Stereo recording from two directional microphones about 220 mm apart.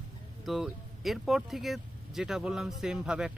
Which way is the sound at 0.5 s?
Centre (ahead or behind).